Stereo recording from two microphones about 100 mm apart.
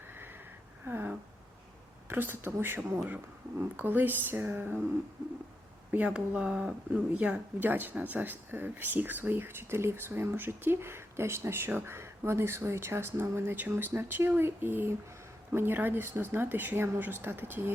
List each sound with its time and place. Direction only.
0.1 s a sound: 20° right (ahead or behind)
2.0 s speech: 20° right (ahead or behind)
6.1 s speech: 10° right (ahead or behind)